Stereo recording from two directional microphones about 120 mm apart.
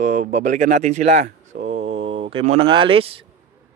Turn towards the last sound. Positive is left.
turn(degrees=-50)  # may be behind; listen again after turning